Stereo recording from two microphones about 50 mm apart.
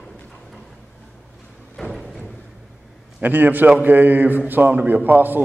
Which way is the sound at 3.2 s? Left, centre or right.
Right.